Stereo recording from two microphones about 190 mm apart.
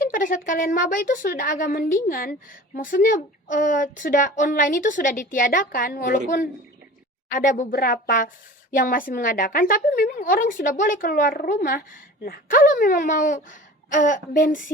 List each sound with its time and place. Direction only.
0.0 s a woman's voice: 45° left (ahead or behind)